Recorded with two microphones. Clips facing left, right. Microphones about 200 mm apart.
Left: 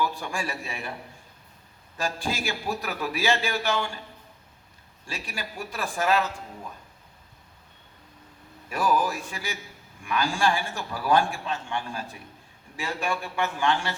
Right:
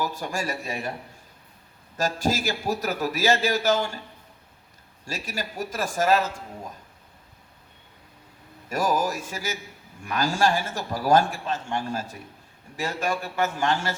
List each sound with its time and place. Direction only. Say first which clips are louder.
0.0 s a man's voice: right 1 dB; 40° right (ahead or behind)
2.0 s a man's voice: right 5 dB; 40° right (ahead or behind)
5.0 s a man's voice: right 4 dB; 40° right (ahead or behind)
8.7 s a man's voice: right 1 dB; 40° right (ahead or behind)